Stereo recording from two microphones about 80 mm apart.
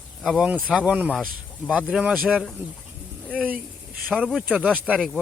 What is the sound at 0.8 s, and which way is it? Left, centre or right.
Speech, right.